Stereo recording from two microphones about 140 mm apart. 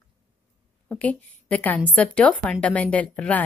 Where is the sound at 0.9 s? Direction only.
10° left (ahead or behind).